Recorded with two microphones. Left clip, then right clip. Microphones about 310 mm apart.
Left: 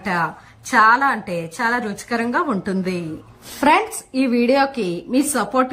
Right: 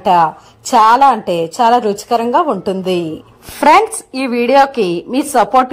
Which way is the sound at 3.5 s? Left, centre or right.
Right.